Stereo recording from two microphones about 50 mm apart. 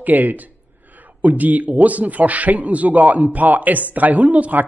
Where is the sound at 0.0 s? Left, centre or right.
Right.